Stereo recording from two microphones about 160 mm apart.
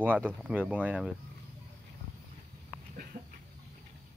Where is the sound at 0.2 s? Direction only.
10° right (ahead or behind).